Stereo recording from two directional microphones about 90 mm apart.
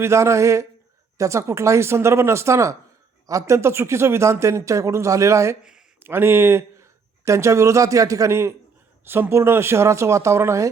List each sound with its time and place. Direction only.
0.0 s speech: 30° right (ahead or behind)